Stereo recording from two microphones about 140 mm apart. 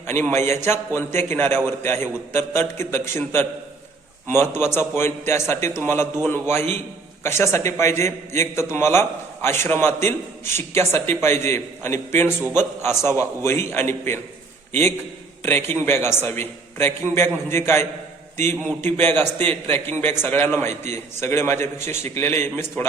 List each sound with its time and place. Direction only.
0.1 s a man's voice: 15° left (ahead or behind)